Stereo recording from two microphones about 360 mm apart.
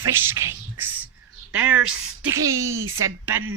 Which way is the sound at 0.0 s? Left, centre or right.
Centre.